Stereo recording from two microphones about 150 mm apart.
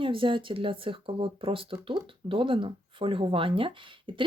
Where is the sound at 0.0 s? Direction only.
35° right (ahead or behind).